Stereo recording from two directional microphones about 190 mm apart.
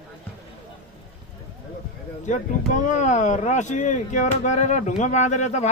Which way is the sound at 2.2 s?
40° left (ahead or behind).